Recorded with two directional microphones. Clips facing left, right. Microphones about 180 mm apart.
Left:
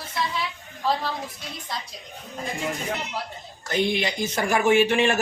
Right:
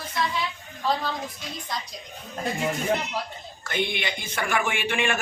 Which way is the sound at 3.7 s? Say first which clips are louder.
Left 4 dB; 35° left (ahead or behind).